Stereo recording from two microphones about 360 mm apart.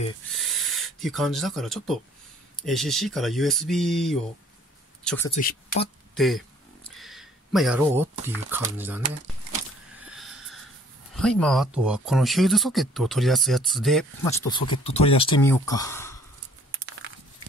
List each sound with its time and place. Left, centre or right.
0.3 s speech: centre
5.3 s speech: left
6.1 s speech: centre
7.0 s a sound: centre
8.5 s speech: centre
10.0 s a sound: centre
11.1 s speech: centre